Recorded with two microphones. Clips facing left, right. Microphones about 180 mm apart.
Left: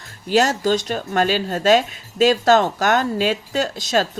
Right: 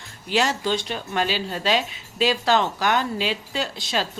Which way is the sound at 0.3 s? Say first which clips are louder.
Left 5 dB; 40° left (ahead or behind).